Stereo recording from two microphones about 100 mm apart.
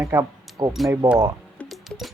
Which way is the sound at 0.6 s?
45° right (ahead or behind).